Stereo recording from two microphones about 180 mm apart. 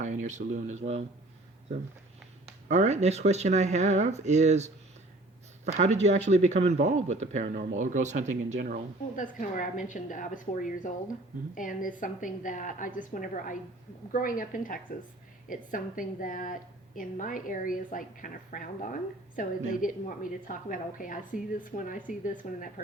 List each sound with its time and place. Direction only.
0.0 s speech: 40° right (ahead or behind)
2.6 s speech: 40° right (ahead or behind)
9.1 s a woman's voice: 45° left (ahead or behind)